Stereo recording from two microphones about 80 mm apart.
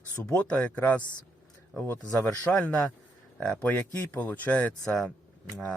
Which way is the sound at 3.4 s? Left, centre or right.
Centre.